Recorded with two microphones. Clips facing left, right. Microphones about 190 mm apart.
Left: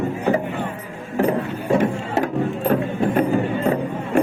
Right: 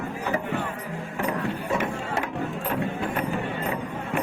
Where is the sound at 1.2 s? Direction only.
35° left (ahead or behind).